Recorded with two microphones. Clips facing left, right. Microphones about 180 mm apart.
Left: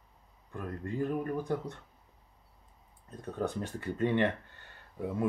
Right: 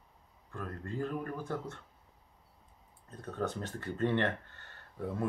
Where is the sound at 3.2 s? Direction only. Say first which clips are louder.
Left 2 dB; 10° left (ahead or behind).